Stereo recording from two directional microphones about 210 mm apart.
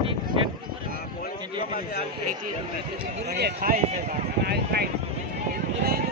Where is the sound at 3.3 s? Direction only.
45° right (ahead or behind).